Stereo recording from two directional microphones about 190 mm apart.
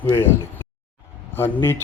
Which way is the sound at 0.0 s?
10° left (ahead or behind).